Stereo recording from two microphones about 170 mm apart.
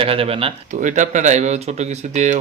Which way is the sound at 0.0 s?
35° right (ahead or behind).